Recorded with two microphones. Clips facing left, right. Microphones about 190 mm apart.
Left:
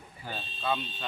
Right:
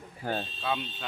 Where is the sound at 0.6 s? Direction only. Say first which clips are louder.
Left 5 dB; 10° right (ahead or behind).